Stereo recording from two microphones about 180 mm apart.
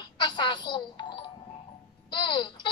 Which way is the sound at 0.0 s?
25° left (ahead or behind).